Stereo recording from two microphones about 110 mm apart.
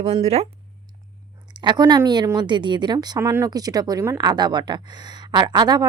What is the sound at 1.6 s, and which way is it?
Speech, 40° right (ahead or behind).